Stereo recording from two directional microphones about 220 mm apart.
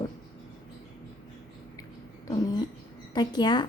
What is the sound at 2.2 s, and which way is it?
A woman's voice, 20° left (ahead or behind).